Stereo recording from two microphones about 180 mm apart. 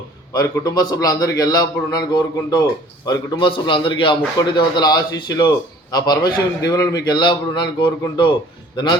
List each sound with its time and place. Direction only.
0.3 s a man's voice: 20° left (ahead or behind)